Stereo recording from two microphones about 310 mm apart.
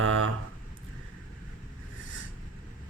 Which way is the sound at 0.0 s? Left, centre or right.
Right.